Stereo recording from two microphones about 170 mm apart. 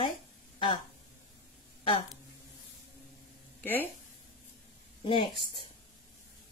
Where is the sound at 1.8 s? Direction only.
30° left (ahead or behind).